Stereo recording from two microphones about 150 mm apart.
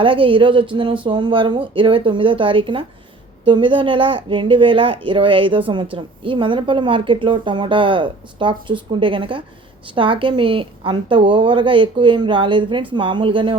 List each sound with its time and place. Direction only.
0.0 s a woman's voice: 35° right (ahead or behind)